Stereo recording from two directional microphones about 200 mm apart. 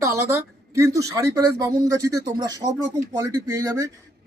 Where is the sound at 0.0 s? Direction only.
15° right (ahead or behind).